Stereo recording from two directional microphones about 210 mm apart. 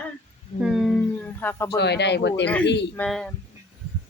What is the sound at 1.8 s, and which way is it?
Speech, 55° left (ahead or behind).